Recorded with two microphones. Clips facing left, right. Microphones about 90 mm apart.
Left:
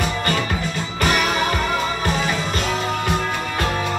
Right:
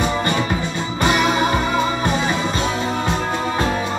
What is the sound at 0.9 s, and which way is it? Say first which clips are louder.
Music: right 3 dB; 20° right (ahead or behind).